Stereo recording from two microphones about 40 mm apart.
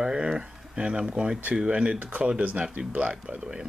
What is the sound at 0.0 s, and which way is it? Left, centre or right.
Speech, centre.